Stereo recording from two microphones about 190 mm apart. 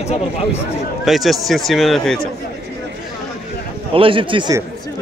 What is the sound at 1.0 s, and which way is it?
Speech, centre (ahead or behind).